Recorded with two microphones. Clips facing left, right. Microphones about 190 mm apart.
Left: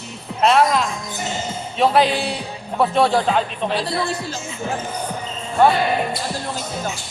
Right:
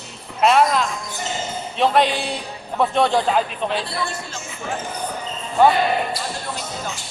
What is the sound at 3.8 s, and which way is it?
Speech, 35° left (ahead or behind).